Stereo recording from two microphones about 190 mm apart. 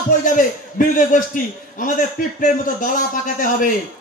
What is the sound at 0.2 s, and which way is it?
A man's voice, 45° left (ahead or behind).